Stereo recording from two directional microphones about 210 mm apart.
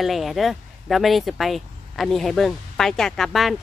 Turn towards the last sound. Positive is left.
turn(degrees=0)  # may be behind; listen again after turning